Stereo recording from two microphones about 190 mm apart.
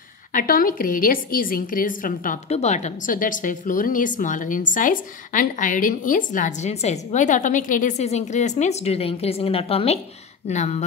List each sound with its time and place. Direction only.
0.3 s a woman's voice: 45° left (ahead or behind)